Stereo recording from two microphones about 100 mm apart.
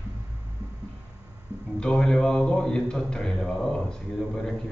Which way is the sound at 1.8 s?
10° left (ahead or behind).